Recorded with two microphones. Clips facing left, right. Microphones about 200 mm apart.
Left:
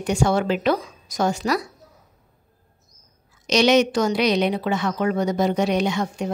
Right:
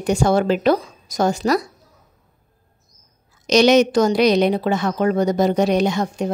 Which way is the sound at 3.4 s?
40° right (ahead or behind).